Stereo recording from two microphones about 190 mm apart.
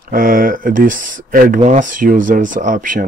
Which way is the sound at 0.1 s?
45° right (ahead or behind).